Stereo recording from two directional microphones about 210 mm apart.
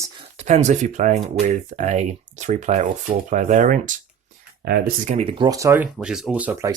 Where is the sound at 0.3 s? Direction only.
35° right (ahead or behind).